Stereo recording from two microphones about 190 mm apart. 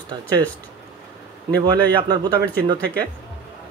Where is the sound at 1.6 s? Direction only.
25° right (ahead or behind).